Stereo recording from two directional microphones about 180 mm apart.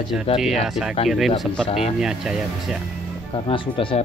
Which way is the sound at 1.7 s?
35° left (ahead or behind).